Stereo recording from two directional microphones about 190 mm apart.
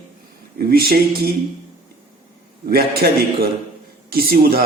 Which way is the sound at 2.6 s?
55° right (ahead or behind).